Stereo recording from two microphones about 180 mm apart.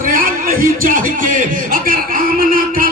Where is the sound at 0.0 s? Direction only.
50° right (ahead or behind).